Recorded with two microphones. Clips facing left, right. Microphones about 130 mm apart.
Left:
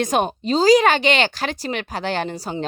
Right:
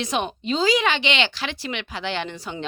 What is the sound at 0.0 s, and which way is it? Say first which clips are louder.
Speech: left 5 dB; 45° left (ahead or behind).